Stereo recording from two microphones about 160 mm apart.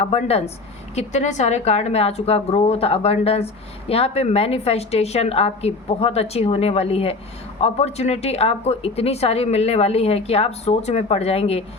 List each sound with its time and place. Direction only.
0.0 s a woman's voice: 40° left (ahead or behind)